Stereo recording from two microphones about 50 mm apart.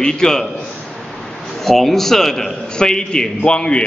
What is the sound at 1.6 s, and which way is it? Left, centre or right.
A man's voice, centre.